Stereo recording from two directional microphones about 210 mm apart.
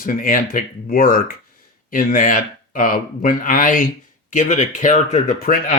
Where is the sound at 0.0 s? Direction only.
40° left (ahead or behind).